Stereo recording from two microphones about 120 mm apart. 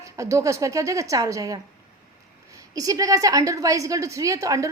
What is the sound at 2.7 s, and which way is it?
A woman's voice, 30° right (ahead or behind).